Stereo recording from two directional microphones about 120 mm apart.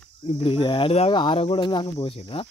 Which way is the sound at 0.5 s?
45° left (ahead or behind).